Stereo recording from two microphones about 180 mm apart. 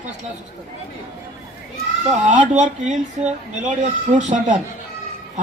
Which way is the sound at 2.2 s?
40° right (ahead or behind).